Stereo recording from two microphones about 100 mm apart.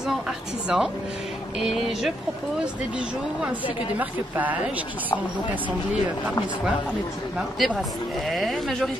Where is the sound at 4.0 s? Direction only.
15° right (ahead or behind).